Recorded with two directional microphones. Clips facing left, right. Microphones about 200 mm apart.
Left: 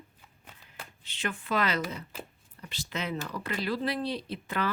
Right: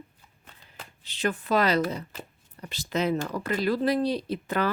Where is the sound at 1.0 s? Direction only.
40° right (ahead or behind).